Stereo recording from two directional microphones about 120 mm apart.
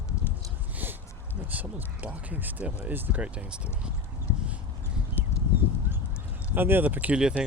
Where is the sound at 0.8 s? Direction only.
15° right (ahead or behind).